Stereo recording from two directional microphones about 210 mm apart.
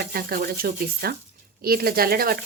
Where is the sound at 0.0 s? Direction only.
45° right (ahead or behind).